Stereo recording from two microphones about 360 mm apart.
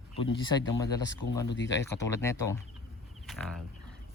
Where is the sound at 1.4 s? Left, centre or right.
Left.